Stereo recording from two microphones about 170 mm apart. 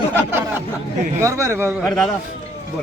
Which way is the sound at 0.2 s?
10° right (ahead or behind).